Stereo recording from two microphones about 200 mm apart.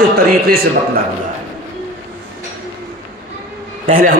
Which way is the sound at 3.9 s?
45° right (ahead or behind).